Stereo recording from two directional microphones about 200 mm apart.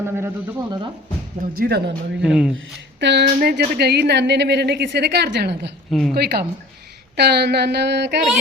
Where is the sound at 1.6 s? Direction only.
55° right (ahead or behind).